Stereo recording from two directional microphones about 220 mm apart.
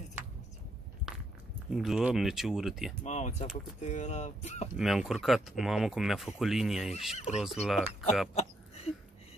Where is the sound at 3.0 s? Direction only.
30° left (ahead or behind).